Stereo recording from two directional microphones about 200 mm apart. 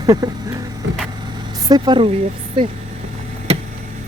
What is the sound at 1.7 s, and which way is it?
Speech, 20° right (ahead or behind).